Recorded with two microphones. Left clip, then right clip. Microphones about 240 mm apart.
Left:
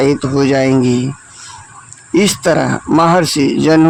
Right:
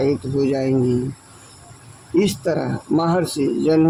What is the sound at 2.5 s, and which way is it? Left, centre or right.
Speech, left.